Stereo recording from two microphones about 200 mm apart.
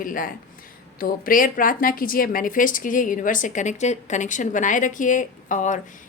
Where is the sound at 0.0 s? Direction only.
45° left (ahead or behind).